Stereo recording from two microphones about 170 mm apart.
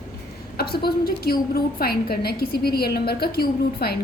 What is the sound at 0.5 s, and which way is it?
A woman's voice, 65° left (ahead or behind).